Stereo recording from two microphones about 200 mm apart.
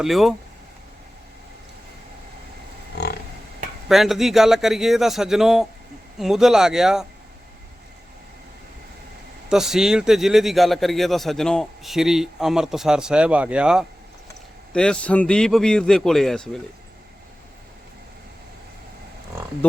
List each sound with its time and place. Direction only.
0.0 s a man's voice: centre (ahead or behind)
2.9 s livestock: 55° left (ahead or behind)
3.8 s a man's voice: centre (ahead or behind)
9.5 s a man's voice: 5° right (ahead or behind)